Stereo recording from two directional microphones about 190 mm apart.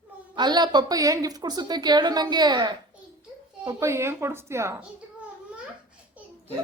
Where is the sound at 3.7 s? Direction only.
15° right (ahead or behind).